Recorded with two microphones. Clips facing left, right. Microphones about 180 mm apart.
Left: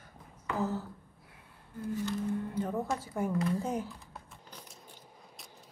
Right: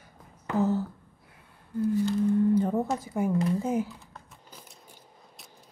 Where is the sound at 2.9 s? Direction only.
10° right (ahead or behind).